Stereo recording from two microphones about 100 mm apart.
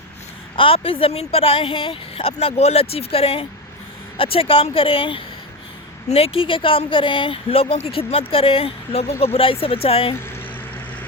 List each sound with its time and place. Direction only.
0.5 s a woman's voice: 65° left (ahead or behind)
6.1 s a woman's voice: 80° left
9.2 s a woman's voice: 70° left (ahead or behind)